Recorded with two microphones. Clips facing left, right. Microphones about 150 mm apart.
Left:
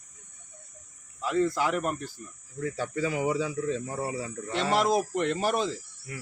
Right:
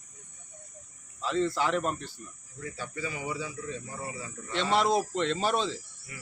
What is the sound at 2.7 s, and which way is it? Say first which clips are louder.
Speech: left 7 dB; 85° left.